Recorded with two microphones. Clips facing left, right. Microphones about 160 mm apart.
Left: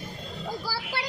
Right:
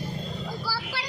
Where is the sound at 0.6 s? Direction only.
20° left (ahead or behind).